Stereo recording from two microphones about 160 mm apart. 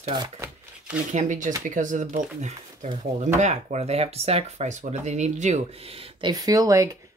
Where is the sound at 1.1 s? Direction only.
50° right (ahead or behind).